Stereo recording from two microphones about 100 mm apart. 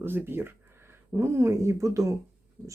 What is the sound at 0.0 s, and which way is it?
Speech, 20° right (ahead or behind).